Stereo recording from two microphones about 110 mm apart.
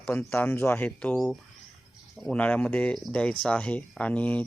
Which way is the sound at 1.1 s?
Centre (ahead or behind).